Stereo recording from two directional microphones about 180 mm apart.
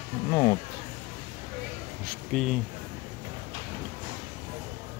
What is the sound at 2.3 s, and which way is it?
Speech, centre (ahead or behind).